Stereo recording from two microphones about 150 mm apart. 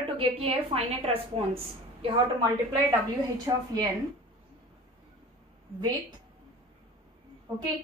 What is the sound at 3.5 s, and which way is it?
Speech, 25° right (ahead or behind).